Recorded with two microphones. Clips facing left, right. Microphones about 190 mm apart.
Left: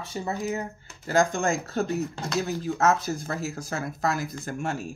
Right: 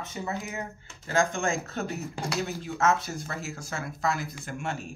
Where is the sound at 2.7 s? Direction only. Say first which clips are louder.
Left 1 dB; 40° left (ahead or behind).